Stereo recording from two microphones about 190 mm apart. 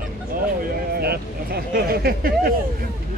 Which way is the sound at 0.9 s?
55° right (ahead or behind).